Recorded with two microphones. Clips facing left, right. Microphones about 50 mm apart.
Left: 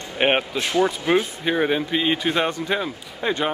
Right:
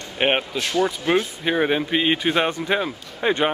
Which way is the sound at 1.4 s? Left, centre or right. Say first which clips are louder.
Right 1 dB; centre.